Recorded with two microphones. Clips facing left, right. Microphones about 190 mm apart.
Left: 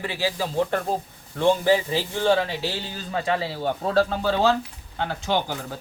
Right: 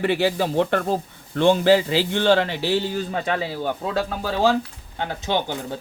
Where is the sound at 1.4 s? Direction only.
85° right; by 2.6 s 70° right (ahead or behind).